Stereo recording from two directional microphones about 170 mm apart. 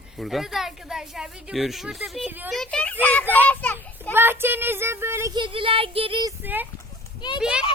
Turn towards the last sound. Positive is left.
turn(degrees=-5)  # may be behind; listen again after turning